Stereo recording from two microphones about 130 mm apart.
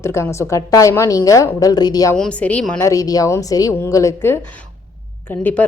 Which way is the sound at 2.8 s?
25° left (ahead or behind).